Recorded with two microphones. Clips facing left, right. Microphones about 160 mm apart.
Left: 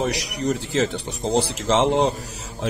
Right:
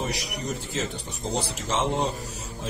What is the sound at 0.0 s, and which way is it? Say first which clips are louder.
Speech: left 7 dB; 90° left.